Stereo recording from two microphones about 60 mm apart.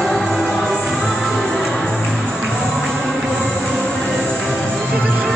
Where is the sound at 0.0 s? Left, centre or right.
Centre.